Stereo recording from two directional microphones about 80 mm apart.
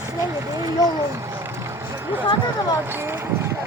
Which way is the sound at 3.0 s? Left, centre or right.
Right.